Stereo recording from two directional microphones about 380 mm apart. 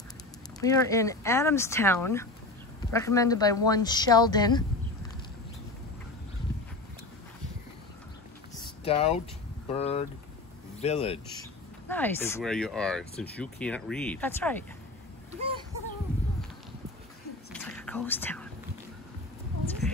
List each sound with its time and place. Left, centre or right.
0.6 s speech: centre
8.8 s speech: centre
11.9 s speech: centre
17.5 s whispering: centre